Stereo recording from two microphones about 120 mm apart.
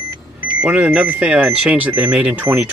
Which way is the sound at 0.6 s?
10° right (ahead or behind).